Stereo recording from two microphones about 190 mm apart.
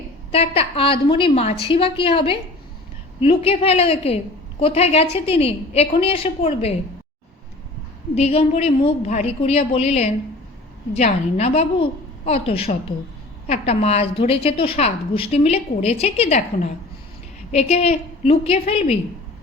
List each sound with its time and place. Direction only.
0.3 s a woman's voice: 30° left (ahead or behind)
8.1 s a woman's voice: 30° left (ahead or behind)